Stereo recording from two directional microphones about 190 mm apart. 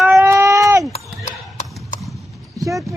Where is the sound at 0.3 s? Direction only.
15° right (ahead or behind).